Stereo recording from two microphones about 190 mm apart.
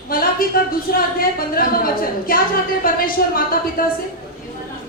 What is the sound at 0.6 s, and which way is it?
A woman's voice, 50° left (ahead or behind).